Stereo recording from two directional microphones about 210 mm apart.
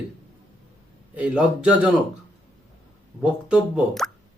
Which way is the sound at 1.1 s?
5° right (ahead or behind).